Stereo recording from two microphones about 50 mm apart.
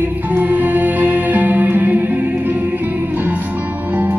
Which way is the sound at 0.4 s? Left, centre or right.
Right.